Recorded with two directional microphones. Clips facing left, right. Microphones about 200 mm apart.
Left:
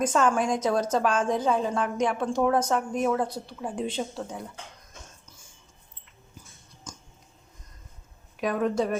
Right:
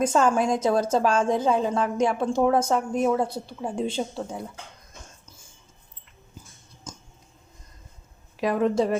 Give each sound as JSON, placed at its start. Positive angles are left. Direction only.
{"t": 0.0, "sound": "a woman's voice", "side_deg": -25}
{"t": 8.4, "sound": "a woman's voice", "side_deg": -30}